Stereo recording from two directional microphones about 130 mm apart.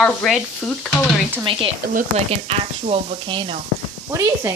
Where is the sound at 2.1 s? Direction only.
55° right (ahead or behind).